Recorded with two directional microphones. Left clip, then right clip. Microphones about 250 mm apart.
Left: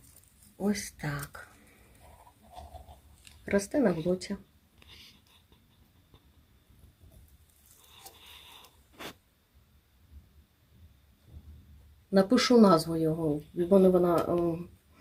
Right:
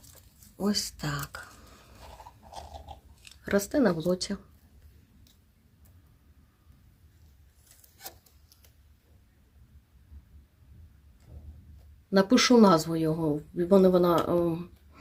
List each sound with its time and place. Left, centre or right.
0.5 s speech: centre
3.2 s speech: centre
12.1 s speech: centre